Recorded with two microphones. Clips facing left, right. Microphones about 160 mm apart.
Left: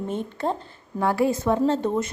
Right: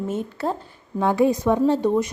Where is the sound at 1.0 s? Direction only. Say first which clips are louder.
Right 3 dB; 20° right (ahead or behind).